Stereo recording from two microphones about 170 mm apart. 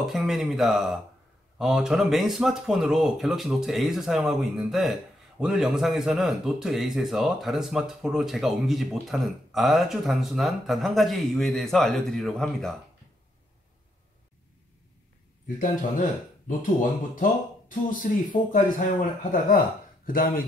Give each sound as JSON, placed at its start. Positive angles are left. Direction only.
{"t": 0.0, "sound": "speech", "side_deg": 0}
{"t": 15.4, "sound": "speech", "side_deg": 50}
{"t": 20.1, "sound": "speech", "side_deg": 55}